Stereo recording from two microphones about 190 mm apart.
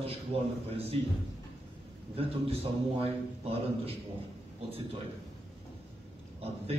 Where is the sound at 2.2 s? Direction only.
30° right (ahead or behind).